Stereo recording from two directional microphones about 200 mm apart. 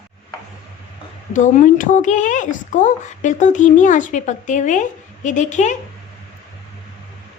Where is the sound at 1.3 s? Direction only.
40° left (ahead or behind).